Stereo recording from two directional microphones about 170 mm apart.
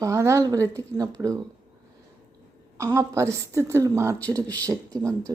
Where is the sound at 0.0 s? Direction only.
15° right (ahead or behind).